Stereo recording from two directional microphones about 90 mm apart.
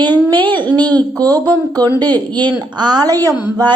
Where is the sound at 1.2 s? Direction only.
45° right (ahead or behind).